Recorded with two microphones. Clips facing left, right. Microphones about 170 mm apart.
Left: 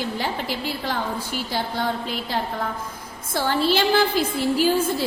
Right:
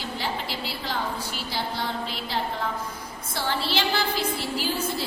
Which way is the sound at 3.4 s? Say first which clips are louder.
Left 7 dB; 50° left (ahead or behind).